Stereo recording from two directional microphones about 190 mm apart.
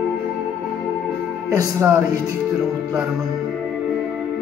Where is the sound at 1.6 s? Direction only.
15° right (ahead or behind).